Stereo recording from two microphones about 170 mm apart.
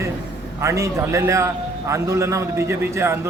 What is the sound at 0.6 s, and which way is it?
A man's voice, 20° right (ahead or behind).